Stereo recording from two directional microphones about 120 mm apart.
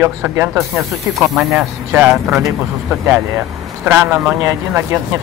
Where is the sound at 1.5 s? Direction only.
10° right (ahead or behind).